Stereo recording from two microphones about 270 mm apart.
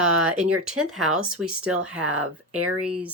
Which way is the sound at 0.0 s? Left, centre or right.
Centre.